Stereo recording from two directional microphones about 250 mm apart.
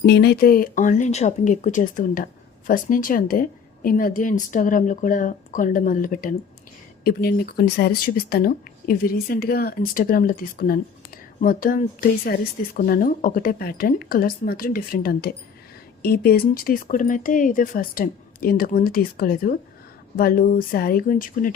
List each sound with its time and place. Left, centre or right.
0.0 s speech: left